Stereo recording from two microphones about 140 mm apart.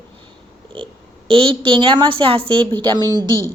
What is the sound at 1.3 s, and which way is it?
A woman's voice, 40° right (ahead or behind).